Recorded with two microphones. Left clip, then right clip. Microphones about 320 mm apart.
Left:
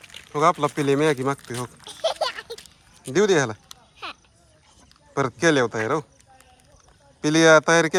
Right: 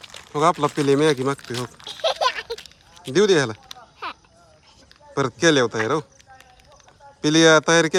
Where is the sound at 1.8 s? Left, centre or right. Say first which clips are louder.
Right 4 dB; right.